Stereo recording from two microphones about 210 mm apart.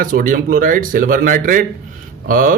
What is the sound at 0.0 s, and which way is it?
Speech, 40° right (ahead or behind).